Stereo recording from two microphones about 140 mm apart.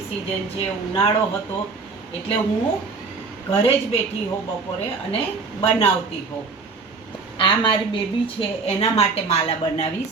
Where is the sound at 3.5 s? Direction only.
40° left (ahead or behind).